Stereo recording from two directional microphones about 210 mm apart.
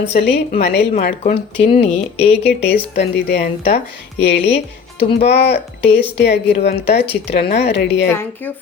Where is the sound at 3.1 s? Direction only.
50° left (ahead or behind).